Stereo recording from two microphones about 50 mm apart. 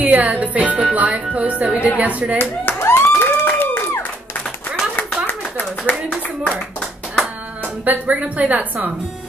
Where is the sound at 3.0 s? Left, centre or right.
Left.